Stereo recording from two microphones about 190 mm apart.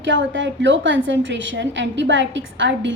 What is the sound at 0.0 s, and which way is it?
A woman's voice, 75° right (ahead or behind).